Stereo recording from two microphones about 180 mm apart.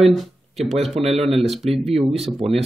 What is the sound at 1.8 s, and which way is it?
Speech, 35° right (ahead or behind).